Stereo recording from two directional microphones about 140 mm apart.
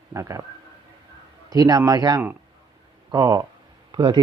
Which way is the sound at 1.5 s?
25° right (ahead or behind).